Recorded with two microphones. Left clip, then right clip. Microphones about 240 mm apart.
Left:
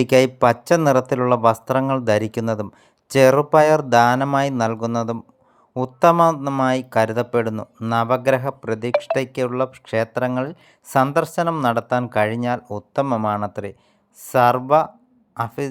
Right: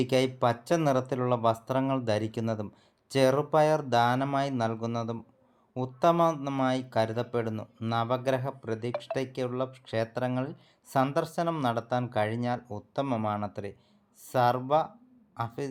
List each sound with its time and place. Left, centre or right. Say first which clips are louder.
0.0 s speech: left 11 dB; left